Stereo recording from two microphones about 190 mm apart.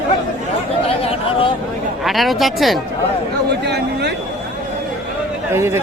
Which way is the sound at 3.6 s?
65° right (ahead or behind).